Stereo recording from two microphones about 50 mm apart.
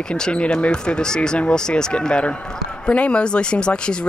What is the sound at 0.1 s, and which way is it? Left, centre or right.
Speech, left.